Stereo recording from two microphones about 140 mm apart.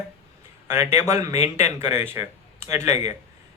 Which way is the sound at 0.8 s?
20° right (ahead or behind).